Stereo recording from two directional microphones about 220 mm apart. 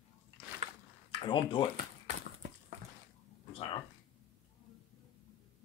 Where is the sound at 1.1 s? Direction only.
20° left (ahead or behind).